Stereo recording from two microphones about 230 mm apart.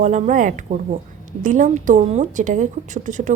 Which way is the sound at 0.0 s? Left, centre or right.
Right.